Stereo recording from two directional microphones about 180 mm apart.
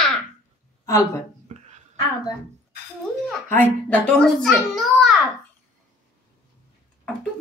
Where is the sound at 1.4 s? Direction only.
40° right (ahead or behind).